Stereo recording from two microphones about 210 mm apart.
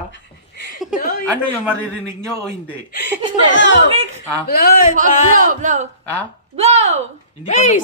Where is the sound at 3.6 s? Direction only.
60° left (ahead or behind).